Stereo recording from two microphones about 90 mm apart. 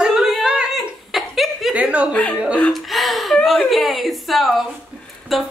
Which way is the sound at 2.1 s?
15° left (ahead or behind).